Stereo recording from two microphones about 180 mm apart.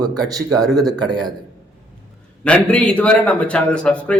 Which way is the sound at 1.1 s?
25° right (ahead or behind).